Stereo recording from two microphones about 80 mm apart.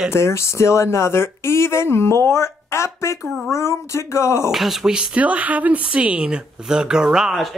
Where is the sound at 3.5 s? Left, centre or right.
Left.